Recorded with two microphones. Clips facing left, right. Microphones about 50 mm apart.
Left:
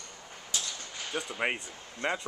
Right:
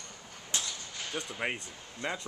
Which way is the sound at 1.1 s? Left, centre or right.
Centre.